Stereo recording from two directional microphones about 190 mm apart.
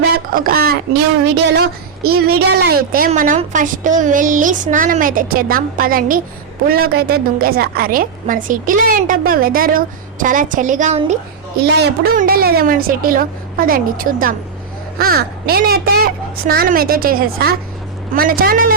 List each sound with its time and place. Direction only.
0.3 s a woman's voice: 50° right (ahead or behind)
2.0 s a woman's voice: 55° right (ahead or behind); by 11.2 s 40° right (ahead or behind)
11.6 s a woman's voice: 60° right (ahead or behind)